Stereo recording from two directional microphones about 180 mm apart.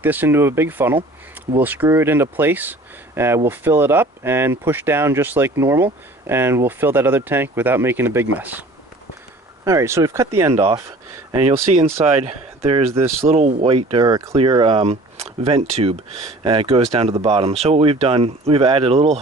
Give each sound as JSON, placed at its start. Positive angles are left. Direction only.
{"t": 0.0, "sound": "speech", "side_deg": -10}
{"t": 9.6, "sound": "speech", "side_deg": -15}
{"t": 11.3, "sound": "speech", "side_deg": -30}
{"t": 14.0, "sound": "speech", "side_deg": -20}
{"t": 14.3, "sound": "speech", "side_deg": -30}